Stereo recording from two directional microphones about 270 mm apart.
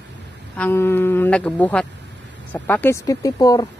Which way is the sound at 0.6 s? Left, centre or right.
Centre.